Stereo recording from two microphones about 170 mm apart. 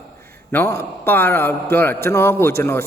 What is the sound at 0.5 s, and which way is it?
A man's voice, 15° left (ahead or behind).